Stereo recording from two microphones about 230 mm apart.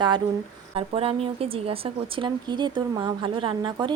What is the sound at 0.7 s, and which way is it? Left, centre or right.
Speech, right.